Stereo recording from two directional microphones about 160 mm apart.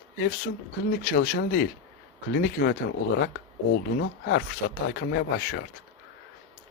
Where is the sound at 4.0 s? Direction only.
90° left.